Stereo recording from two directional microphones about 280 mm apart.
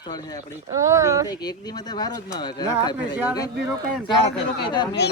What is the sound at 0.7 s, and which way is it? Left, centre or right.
Speech, centre.